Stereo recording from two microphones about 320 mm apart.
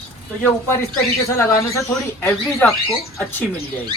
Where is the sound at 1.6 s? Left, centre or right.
Centre.